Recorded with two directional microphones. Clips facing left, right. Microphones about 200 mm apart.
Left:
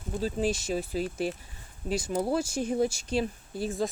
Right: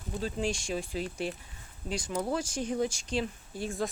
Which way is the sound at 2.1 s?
30° left (ahead or behind).